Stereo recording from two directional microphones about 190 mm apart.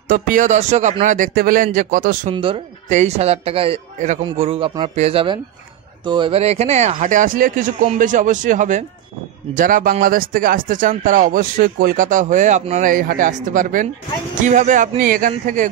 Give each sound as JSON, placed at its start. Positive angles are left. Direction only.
{"t": 0.1, "sound": "speech", "side_deg": -45}
{"t": 2.3, "sound": "a man's voice", "side_deg": -30}